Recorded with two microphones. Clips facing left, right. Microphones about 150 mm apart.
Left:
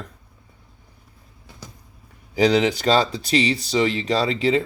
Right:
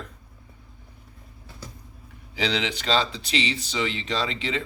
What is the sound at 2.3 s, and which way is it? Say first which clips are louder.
Speech: left 10 dB; 40° left (ahead or behind).